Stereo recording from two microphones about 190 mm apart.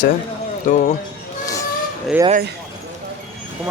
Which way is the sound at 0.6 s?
40° left (ahead or behind).